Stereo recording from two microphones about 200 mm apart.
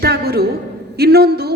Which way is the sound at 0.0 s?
55° right (ahead or behind).